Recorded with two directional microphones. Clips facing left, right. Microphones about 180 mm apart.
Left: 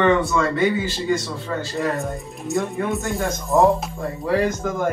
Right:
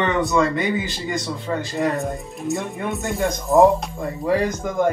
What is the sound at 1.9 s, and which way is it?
Speech, centre (ahead or behind).